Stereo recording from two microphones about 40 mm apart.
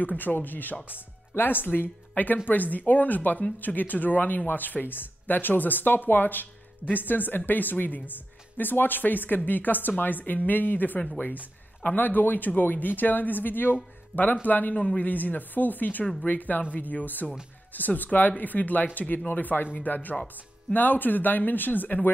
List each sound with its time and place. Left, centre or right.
0.2 s speech: left
14.1 s speech: left